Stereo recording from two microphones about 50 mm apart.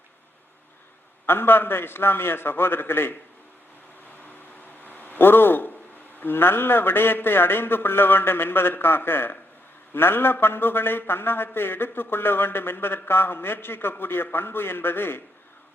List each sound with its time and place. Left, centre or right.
1.3 s a man's voice: left
4.8 s a sound: left
6.1 s a man's voice: left